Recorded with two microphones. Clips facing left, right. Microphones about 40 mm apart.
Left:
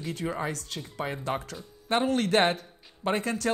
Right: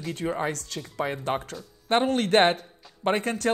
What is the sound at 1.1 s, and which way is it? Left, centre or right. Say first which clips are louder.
Speech: right 3 dB; right.